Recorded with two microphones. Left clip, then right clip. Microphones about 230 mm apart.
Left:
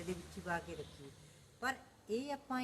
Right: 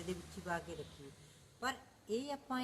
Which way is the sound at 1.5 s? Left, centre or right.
Centre.